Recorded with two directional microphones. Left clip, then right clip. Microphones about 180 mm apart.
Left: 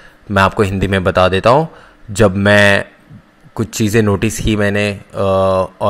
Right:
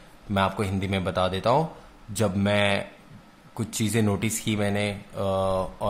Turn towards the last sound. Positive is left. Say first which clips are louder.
# left 12 dB
turn(degrees=30)  # may be behind; listen again after turning